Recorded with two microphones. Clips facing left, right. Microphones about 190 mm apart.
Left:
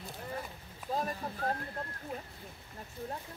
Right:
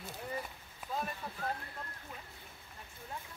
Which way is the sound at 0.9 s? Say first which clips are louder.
Left 4 dB; 40° left (ahead or behind).